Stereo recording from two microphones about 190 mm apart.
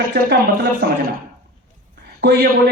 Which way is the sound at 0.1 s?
60° right (ahead or behind).